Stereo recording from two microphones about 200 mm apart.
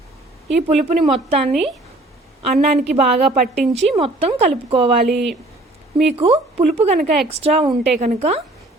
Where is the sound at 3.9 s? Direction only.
30° right (ahead or behind).